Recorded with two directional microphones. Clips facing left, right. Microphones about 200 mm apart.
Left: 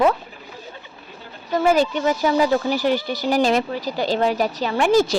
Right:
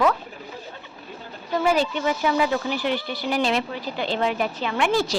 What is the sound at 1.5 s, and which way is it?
Speech, 45° left (ahead or behind).